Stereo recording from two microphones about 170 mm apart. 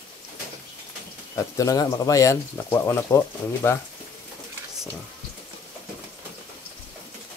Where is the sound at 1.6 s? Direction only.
20° left (ahead or behind).